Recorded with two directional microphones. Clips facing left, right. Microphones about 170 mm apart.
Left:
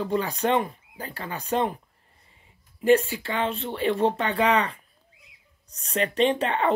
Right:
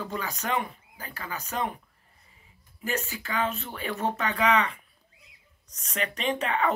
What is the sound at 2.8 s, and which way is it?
Speech, 30° left (ahead or behind).